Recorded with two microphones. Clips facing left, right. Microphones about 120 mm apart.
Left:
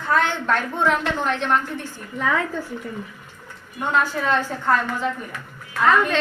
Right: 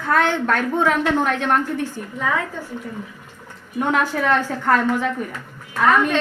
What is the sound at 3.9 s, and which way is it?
A woman's voice, 65° right (ahead or behind).